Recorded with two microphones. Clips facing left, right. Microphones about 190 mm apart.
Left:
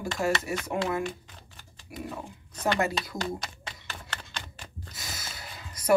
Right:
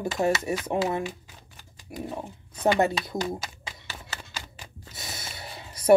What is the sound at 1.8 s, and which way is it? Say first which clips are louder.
Dog: right 3 dB; 25° right (ahead or behind).